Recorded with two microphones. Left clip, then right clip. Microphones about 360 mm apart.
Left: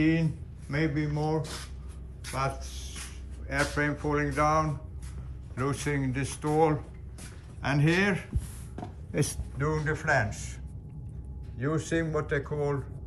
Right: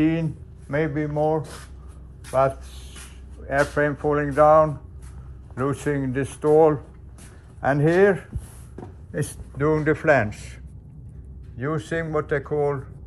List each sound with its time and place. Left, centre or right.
0.7 s speech: centre
3.5 s speech: centre
9.9 s speech: left
11.6 s speech: centre